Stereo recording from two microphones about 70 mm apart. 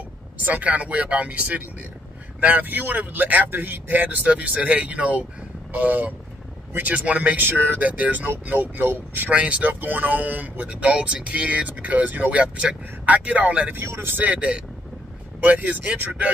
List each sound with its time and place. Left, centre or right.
0.5 s speech: right
9.3 s speech: centre
13.7 s speech: right
14.1 s speech: right